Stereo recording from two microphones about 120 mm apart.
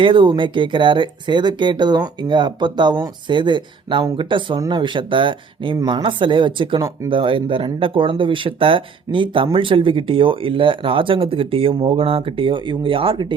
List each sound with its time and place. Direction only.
0.0 s speech: 45° right (ahead or behind)